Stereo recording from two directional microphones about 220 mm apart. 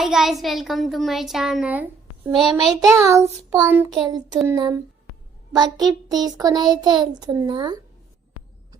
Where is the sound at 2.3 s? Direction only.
20° right (ahead or behind).